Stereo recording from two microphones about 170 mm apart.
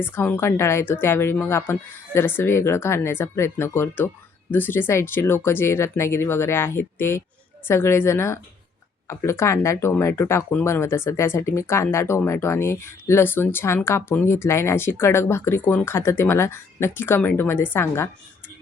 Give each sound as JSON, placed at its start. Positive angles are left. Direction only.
{"t": 0.0, "sound": "speech", "side_deg": 10}